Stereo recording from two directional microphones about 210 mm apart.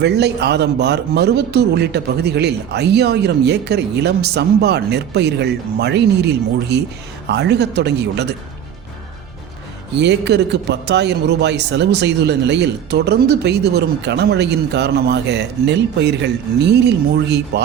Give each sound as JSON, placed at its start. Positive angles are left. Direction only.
{"t": 0.0, "sound": "a man's voice", "side_deg": -50}
{"t": 9.9, "sound": "a man's voice", "side_deg": -55}